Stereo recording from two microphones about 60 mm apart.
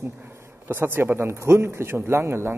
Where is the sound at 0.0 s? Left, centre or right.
Right.